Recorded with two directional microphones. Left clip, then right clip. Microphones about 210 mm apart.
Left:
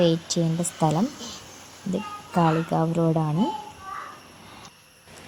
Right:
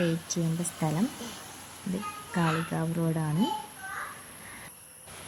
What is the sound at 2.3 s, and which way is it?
Speech, 15° left (ahead or behind).